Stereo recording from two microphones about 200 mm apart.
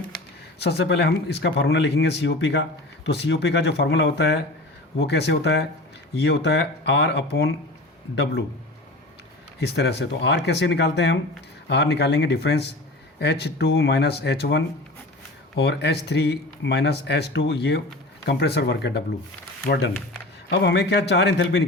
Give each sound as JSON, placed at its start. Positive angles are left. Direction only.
{"t": 0.6, "sound": "speech", "side_deg": 55}
{"t": 9.6, "sound": "speech", "side_deg": 55}